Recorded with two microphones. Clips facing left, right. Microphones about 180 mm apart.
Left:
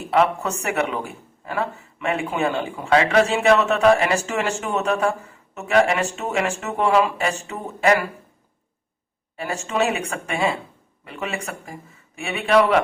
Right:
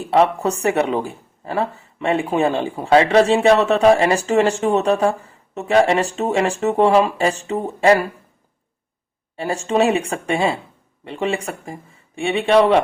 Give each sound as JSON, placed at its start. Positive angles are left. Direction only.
{"t": 0.1, "sound": "speech", "side_deg": -35}
{"t": 9.3, "sound": "speech", "side_deg": -30}